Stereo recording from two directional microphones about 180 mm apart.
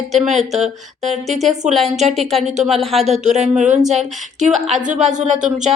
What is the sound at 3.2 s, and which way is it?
Speech, 40° right (ahead or behind).